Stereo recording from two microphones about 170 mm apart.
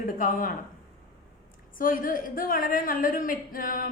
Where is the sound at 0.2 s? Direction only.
55° left (ahead or behind).